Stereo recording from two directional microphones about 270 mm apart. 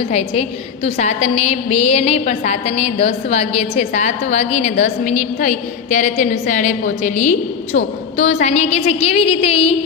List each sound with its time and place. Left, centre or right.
0.1 s a woman's voice: left